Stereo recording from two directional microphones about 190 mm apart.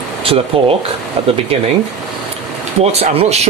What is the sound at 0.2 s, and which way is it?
Speech, 30° right (ahead or behind).